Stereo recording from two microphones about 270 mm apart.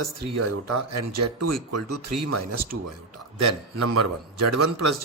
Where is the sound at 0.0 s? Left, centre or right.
Right.